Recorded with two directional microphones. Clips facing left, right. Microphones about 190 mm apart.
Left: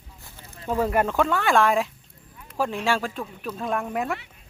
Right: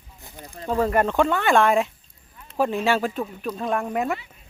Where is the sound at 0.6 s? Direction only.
10° left (ahead or behind).